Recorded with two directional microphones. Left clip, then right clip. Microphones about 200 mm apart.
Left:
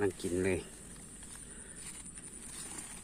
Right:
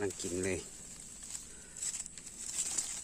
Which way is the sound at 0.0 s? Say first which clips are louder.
Left 4 dB; 10° right (ahead or behind).